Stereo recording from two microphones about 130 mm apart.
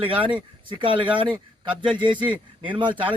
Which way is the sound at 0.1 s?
40° right (ahead or behind).